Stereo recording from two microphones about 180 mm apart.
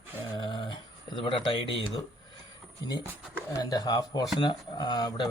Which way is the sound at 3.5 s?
20° left (ahead or behind).